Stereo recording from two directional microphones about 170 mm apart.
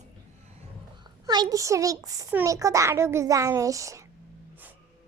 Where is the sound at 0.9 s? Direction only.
25° right (ahead or behind).